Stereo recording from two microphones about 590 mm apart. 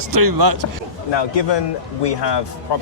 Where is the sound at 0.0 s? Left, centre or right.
Right.